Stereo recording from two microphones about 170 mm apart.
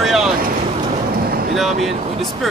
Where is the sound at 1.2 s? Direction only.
65° right (ahead or behind).